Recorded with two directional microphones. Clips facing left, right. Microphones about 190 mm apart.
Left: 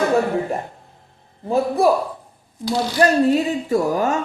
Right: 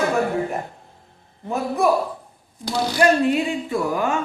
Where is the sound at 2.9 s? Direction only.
40° left (ahead or behind).